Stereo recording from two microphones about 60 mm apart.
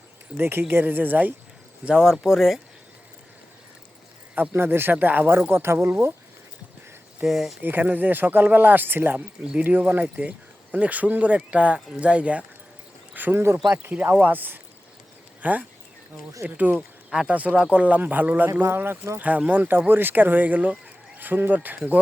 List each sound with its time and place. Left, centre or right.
0.3 s speech: right
1.8 s speech: centre
2.2 s speech: centre
4.4 s speech: right
5.5 s speech: right
7.3 s speech: centre
7.6 s speech: right
9.4 s speech: centre
9.6 s speech: right
13.3 s speech: right
13.9 s speech: right
18.6 s speech: right
19.2 s speech: right